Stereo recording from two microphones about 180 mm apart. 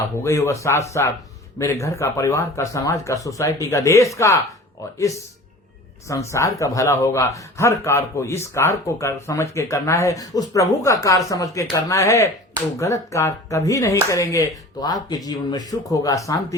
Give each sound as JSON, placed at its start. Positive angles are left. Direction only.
{"t": 0.2, "sound": "speech", "side_deg": 15}